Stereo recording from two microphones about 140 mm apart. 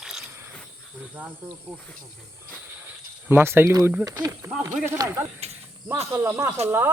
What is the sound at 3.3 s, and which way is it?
Speech, 15° right (ahead or behind).